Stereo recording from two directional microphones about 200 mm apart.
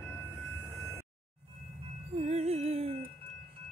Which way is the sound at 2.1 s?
35° right (ahead or behind).